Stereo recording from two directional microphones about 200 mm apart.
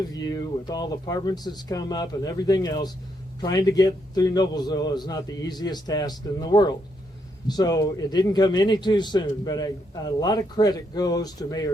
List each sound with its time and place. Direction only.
0.1 s a man's voice: 20° left (ahead or behind)